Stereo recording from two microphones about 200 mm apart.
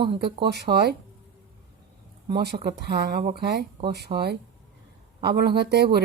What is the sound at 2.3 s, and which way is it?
Speech, 50° right (ahead or behind).